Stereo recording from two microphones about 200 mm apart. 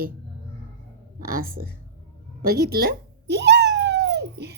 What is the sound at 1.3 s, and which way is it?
A woman's voice, 45° right (ahead or behind).